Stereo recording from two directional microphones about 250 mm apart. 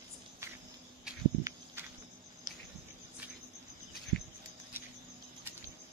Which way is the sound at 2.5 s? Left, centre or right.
Centre.